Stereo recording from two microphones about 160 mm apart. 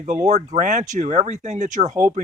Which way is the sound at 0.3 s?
45° right (ahead or behind).